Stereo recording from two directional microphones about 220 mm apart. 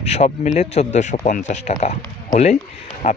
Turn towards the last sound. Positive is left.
turn(degrees=30)  # may be behind; listen again after turning